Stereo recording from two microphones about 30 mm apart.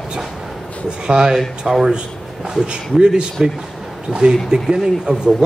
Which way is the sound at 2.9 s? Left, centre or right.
Right.